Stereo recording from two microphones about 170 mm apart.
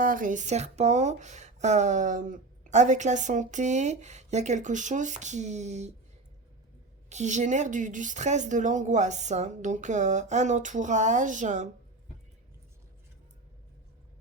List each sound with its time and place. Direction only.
0.0 s speech: 50° right (ahead or behind)
7.1 s speech: 45° right (ahead or behind)